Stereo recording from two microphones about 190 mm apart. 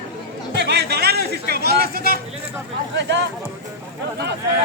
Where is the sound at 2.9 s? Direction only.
65° right (ahead or behind).